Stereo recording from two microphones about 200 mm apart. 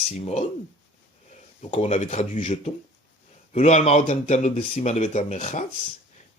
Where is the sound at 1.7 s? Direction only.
35° left (ahead or behind).